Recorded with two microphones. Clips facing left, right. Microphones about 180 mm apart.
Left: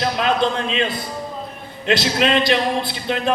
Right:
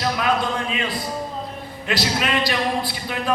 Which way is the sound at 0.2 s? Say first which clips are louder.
Left 3 dB; 25° left (ahead or behind).